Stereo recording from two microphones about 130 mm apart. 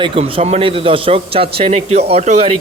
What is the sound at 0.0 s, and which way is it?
A man's voice, 45° right (ahead or behind).